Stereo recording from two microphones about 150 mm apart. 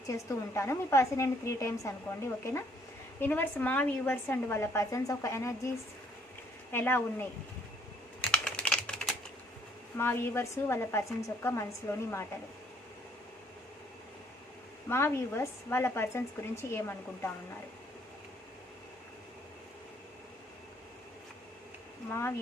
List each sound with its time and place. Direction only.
0.1 s a woman's voice: 20° left (ahead or behind)
8.3 s typing: 5° left (ahead or behind)
10.0 s speech: 15° left (ahead or behind)
14.8 s speech: 15° left (ahead or behind)
22.1 s speech: 15° left (ahead or behind)